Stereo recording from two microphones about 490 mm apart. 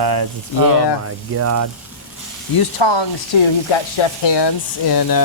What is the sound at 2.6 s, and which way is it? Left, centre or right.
Speech, left.